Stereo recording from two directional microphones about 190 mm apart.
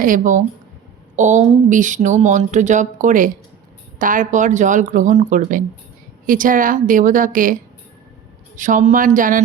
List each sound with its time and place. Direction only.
0.0 s a woman's voice: 45° right (ahead or behind)
8.5 s a woman's voice: 45° right (ahead or behind)